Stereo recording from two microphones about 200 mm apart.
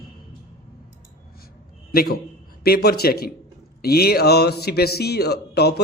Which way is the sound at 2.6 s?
50° left (ahead or behind).